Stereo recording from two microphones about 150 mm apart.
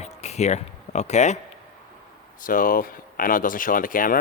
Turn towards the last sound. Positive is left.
turn(degrees=65)  # may be behind; listen again after turning